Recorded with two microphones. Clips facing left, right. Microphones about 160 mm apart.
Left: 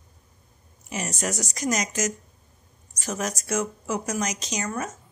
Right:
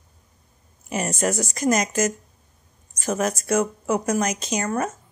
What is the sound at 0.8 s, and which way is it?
A woman's voice, 55° right (ahead or behind).